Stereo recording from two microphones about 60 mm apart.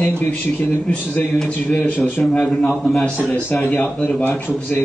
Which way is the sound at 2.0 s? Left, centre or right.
Centre.